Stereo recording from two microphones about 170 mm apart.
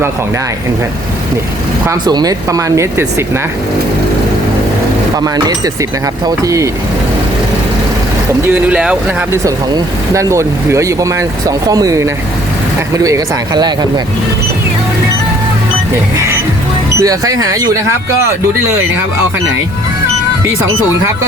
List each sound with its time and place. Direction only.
1.9 s speech: 25° right (ahead or behind)
6.2 s speech: 20° right (ahead or behind)
8.5 s speech: 10° right (ahead or behind)
9.4 s speech: 20° right (ahead or behind)
17.0 s speech: 20° right (ahead or behind)